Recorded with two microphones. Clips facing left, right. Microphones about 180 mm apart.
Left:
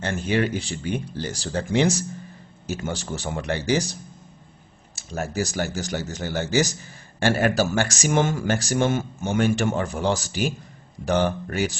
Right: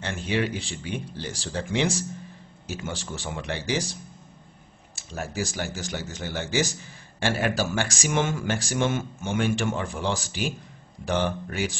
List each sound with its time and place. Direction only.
0.0 s speech: 45° left (ahead or behind)
4.9 s speech: 45° left (ahead or behind)